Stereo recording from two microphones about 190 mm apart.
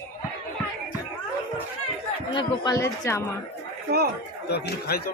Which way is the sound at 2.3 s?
25° left (ahead or behind).